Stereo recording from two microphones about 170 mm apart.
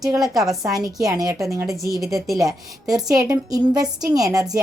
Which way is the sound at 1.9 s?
Centre (ahead or behind).